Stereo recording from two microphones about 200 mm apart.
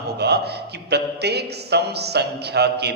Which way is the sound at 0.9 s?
55° right (ahead or behind).